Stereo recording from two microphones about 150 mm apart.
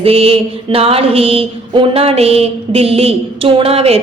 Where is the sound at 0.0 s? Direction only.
40° right (ahead or behind).